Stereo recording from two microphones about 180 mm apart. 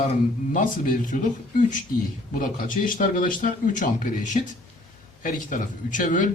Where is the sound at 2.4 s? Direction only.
45° left (ahead or behind).